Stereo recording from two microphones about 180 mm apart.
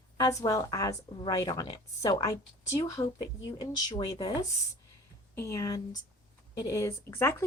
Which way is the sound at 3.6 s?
20° left (ahead or behind).